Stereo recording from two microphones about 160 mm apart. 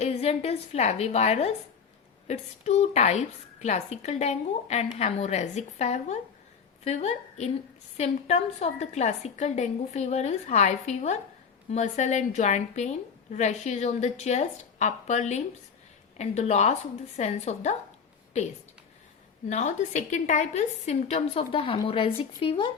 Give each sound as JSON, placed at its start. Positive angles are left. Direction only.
{"t": 0.0, "sound": "a woman's voice", "side_deg": 40}